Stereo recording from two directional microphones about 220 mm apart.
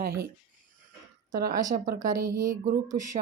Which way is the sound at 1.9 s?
15° right (ahead or behind).